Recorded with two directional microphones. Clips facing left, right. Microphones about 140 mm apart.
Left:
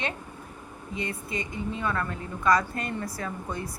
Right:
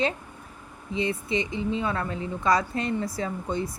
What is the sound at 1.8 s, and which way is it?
Speech, 25° right (ahead or behind).